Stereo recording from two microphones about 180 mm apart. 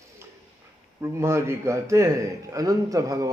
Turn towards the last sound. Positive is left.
turn(degrees=-20)  # may be behind; listen again after turning